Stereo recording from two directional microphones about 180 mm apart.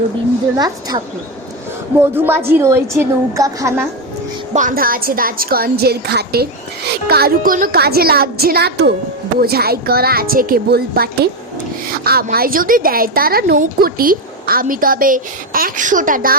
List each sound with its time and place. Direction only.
0.5 s a woman's voice: 20° right (ahead or behind)
4.5 s a woman's voice: 50° right (ahead or behind)